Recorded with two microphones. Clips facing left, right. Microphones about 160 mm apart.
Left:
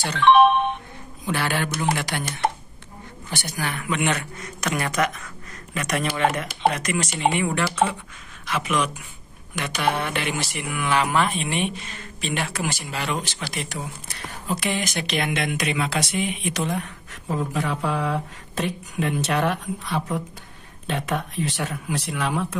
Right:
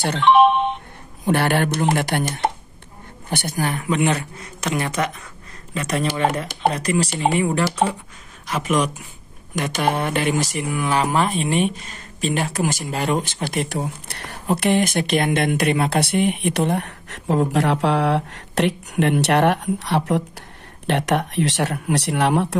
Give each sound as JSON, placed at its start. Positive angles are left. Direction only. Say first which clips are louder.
{"t": 0.2, "sound": "speech", "louder": "right 1 dB", "side_deg": -15}
{"t": 1.2, "sound": "speech", "louder": "right 6 dB", "side_deg": -55}
{"t": 3.3, "sound": "speech", "louder": "right 6 dB", "side_deg": -55}